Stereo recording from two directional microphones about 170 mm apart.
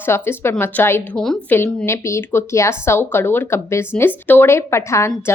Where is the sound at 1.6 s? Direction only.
15° left (ahead or behind).